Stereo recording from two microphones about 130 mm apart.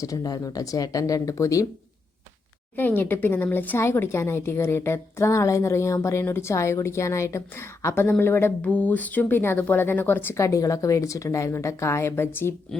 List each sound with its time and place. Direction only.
0.0 s speech: 30° left (ahead or behind)
2.7 s speech: 15° left (ahead or behind)